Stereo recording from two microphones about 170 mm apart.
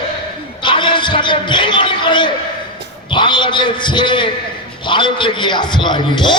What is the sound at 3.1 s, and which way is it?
A man's voice, 30° left (ahead or behind).